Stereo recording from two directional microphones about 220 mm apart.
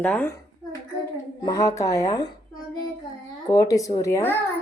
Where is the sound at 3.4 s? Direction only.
15° left (ahead or behind).